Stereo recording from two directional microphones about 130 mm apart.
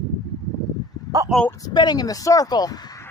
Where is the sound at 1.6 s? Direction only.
35° left (ahead or behind).